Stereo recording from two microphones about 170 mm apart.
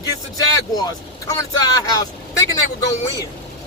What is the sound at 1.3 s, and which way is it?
Speech, 20° left (ahead or behind).